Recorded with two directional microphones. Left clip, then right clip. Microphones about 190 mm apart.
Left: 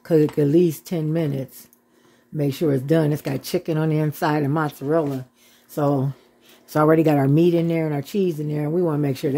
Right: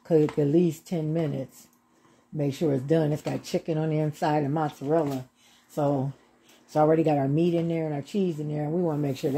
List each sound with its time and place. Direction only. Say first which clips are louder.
0.0 s speech: left 4 dB; 35° left (ahead or behind)